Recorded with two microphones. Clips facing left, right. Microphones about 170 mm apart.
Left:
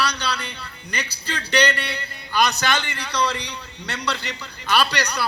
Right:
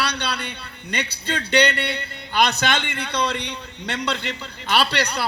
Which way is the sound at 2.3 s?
55° right (ahead or behind).